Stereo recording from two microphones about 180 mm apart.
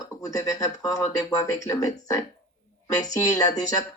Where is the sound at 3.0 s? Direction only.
20° left (ahead or behind).